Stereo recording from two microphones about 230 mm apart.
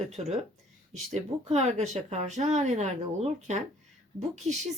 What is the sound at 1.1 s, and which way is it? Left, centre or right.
Speech, right.